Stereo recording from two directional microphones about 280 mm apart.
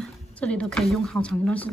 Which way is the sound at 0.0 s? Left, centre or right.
Centre.